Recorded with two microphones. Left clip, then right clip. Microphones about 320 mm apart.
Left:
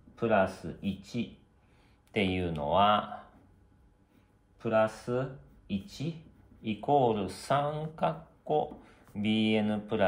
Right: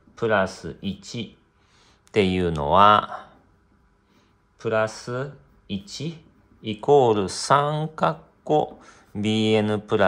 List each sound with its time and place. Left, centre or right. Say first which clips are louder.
0.1 s speech: right 5 dB; right
4.6 s speech: right 4 dB; right